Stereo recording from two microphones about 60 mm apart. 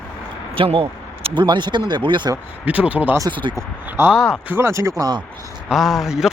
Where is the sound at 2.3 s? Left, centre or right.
Right.